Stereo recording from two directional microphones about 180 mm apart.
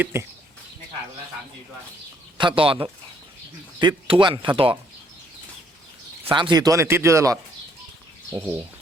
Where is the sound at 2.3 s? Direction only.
30° right (ahead or behind).